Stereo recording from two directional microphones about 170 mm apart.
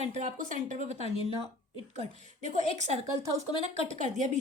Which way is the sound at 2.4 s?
45° right (ahead or behind).